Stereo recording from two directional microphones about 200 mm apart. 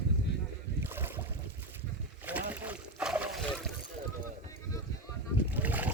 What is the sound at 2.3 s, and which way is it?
Boat, 10° right (ahead or behind).